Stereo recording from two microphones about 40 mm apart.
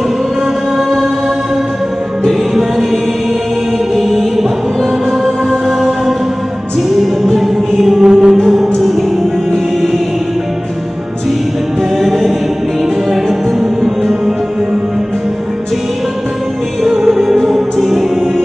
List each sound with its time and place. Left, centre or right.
3.9 s mantra: centre
5.2 s music: centre
7.3 s music: centre
8.1 s music: centre
8.5 s music: centre
12.0 s choir: centre
13.1 s music: centre
16.8 s music: centre